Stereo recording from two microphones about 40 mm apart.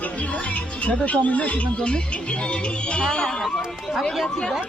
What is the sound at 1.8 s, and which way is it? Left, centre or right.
Speech, left.